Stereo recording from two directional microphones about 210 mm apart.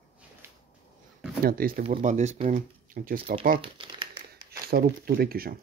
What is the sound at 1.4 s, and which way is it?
Speech, 45° right (ahead or behind).